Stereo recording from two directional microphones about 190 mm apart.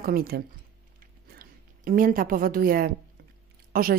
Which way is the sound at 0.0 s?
50° right (ahead or behind).